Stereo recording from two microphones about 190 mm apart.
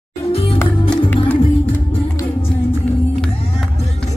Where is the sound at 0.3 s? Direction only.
30° left (ahead or behind).